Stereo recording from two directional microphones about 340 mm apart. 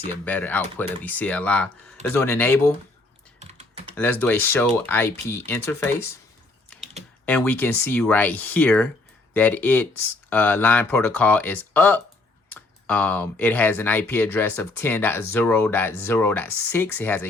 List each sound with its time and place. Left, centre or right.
0.3 s speech: centre
3.4 s typing: centre
3.9 s speech: centre
7.3 s speech: centre